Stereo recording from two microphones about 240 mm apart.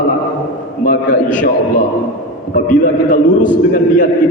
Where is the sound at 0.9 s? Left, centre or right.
Left.